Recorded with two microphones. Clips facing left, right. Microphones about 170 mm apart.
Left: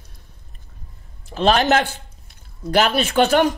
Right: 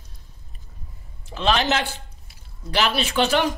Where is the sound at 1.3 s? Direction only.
45° left (ahead or behind).